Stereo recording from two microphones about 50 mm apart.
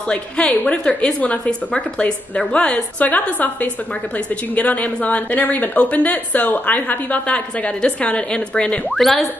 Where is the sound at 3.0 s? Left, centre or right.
Left.